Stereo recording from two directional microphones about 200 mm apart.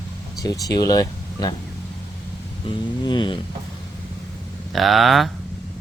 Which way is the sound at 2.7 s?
25° left (ahead or behind).